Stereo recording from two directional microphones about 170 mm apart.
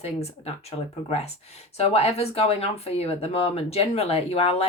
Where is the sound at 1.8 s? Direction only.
35° left (ahead or behind).